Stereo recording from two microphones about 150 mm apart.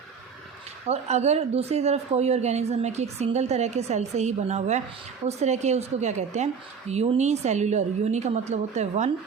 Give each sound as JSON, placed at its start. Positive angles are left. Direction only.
{"t": 0.9, "sound": "speech", "side_deg": -45}